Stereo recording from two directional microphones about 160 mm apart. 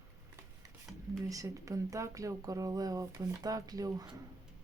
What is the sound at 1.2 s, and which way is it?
Speech, 20° right (ahead or behind).